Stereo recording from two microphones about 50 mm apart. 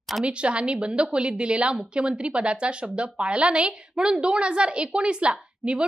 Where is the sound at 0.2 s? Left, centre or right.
Right.